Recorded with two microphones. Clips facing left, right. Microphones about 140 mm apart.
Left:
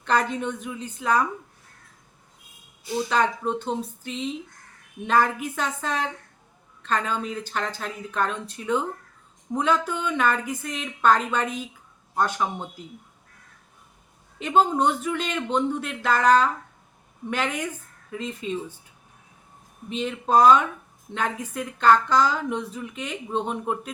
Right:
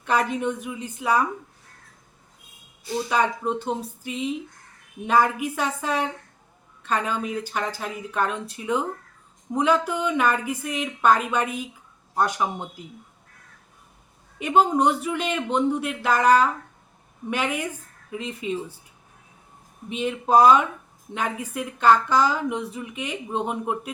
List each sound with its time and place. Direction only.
0.0 s speech: 10° right (ahead or behind)
3.1 s speech: 10° right (ahead or behind)
14.3 s speech: 10° right (ahead or behind)
19.9 s speech: 10° right (ahead or behind)